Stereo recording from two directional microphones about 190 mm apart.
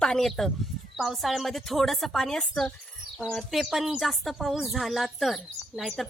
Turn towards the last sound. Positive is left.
turn(degrees=0)  # may be behind; listen again after turning